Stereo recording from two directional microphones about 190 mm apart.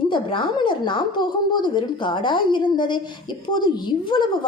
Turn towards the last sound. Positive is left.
turn(degrees=25)  # may be behind; listen again after turning